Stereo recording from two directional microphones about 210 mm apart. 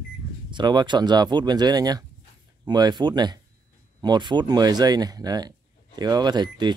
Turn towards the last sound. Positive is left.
turn(degrees=-20)  # may be behind; listen again after turning